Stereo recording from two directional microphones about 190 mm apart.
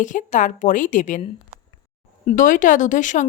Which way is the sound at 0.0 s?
40° left (ahead or behind).